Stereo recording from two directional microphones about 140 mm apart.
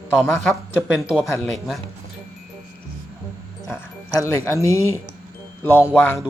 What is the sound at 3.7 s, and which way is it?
Speech, 15° left (ahead or behind).